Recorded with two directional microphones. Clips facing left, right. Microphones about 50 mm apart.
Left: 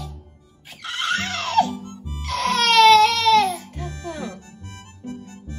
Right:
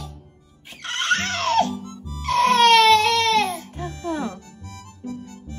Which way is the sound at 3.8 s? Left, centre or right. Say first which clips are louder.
Right 4 dB; right.